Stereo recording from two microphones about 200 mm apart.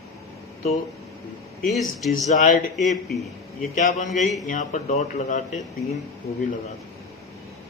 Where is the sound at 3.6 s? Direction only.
40° left (ahead or behind).